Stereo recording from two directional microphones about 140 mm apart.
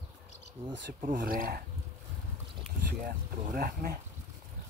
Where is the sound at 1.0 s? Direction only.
75° right (ahead or behind); by 1.6 s 90° right.